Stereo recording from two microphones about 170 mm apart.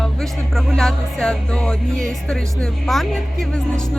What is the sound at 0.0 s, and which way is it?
Music, centre (ahead or behind).